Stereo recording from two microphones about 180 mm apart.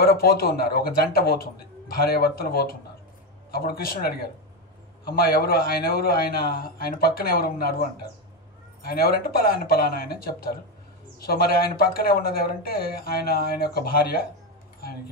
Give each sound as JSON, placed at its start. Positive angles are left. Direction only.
{"t": 0.0, "sound": "speech", "side_deg": 55}
{"t": 8.8, "sound": "speech", "side_deg": 55}